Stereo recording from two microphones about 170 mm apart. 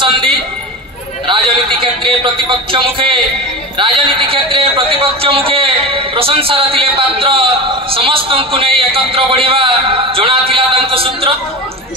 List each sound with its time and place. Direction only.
1.2 s a man's voice: 30° right (ahead or behind)